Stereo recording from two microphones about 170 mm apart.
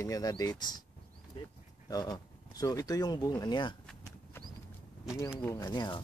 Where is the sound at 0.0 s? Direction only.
20° left (ahead or behind).